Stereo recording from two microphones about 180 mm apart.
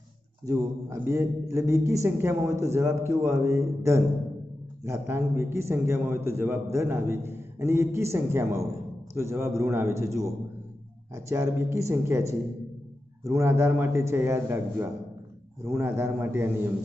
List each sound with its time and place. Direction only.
0.5 s a man's voice: 15° right (ahead or behind)